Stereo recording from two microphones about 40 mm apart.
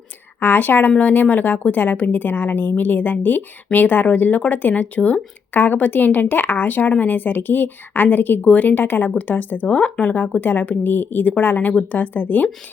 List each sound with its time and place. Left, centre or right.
0.3 s a woman's voice: left
0.9 s a woman's voice: left
5.5 s a woman's voice: left
8.4 s a woman's voice: left
9.6 s a woman's voice: left